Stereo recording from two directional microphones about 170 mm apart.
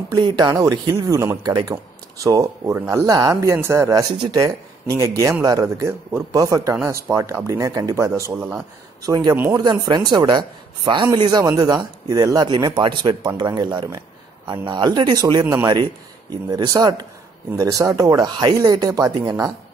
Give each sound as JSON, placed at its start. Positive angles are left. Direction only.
{"t": 0.1, "sound": "speech", "side_deg": -25}
{"t": 9.0, "sound": "speech", "side_deg": -20}
{"t": 9.3, "sound": "speech", "side_deg": -10}
{"t": 9.6, "sound": "speech", "side_deg": -25}
{"t": 15.4, "sound": "speech", "side_deg": -15}
{"t": 15.7, "sound": "speech", "side_deg": -25}